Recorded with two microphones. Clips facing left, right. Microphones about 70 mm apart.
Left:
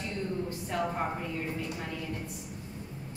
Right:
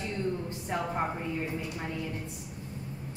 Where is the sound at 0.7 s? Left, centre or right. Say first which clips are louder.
Left 1 dB; right.